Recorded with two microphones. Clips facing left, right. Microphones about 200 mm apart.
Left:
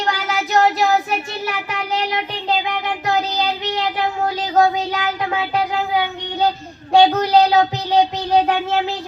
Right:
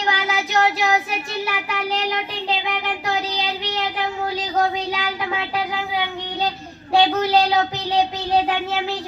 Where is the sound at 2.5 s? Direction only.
50° left (ahead or behind).